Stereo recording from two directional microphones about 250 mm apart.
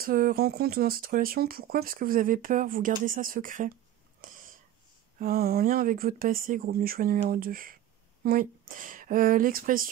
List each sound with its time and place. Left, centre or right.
0.0 s speech: right
4.2 s whispering: right
5.2 s speech: right